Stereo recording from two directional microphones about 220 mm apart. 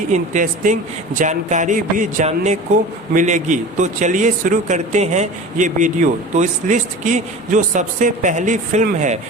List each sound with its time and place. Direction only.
0.1 s speech: 35° right (ahead or behind)